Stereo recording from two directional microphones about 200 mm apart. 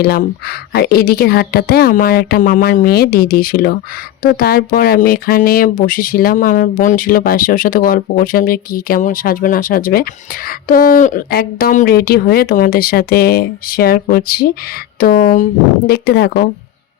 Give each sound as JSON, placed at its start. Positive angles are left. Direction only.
{"t": 0.0, "sound": "speech", "side_deg": 50}